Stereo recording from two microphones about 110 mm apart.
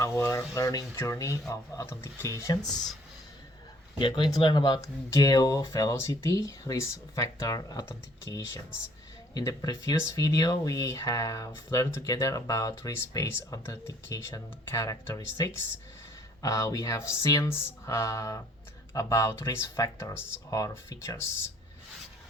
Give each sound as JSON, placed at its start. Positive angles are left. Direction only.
{"t": 0.0, "sound": "speech", "side_deg": 25}
{"t": 3.9, "sound": "speech", "side_deg": 45}